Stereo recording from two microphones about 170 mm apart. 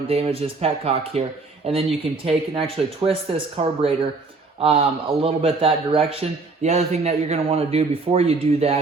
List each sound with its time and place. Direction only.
0.1 s a man's voice: 35° right (ahead or behind)